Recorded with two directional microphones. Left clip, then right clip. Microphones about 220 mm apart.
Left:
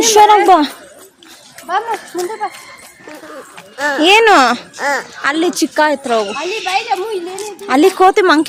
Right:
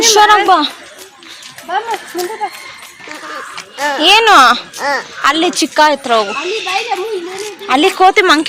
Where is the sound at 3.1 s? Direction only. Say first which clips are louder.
Right 6 dB; centre (ahead or behind).